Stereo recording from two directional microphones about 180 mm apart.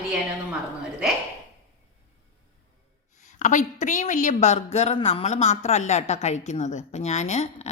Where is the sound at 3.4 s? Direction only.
45° left (ahead or behind).